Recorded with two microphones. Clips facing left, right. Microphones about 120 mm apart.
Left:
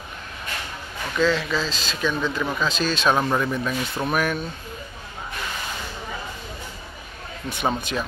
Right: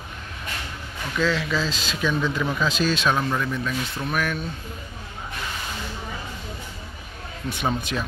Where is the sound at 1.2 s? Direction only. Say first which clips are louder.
Left 2 dB; centre (ahead or behind).